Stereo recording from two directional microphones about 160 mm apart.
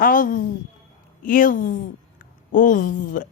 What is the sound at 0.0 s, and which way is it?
Speech, 60° left (ahead or behind).